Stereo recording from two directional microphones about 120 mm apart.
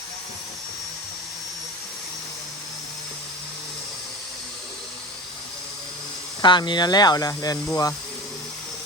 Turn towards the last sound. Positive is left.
turn(degrees=30)  # may be behind; listen again after turning